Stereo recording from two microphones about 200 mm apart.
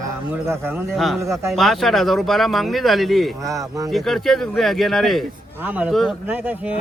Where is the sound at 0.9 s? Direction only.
Centre (ahead or behind).